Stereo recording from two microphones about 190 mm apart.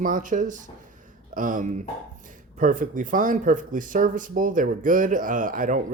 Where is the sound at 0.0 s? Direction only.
45° right (ahead or behind).